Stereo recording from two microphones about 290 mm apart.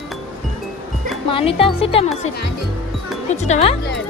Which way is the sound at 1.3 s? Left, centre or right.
Centre.